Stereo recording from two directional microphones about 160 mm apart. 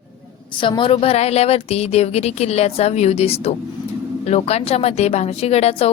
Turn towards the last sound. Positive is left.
turn(degrees=40)  # may be behind; listen again after turning